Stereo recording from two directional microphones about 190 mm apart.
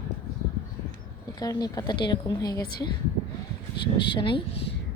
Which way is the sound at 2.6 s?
55° left (ahead or behind).